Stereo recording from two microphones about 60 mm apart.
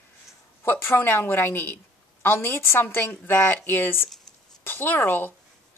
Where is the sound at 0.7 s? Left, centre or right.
Left.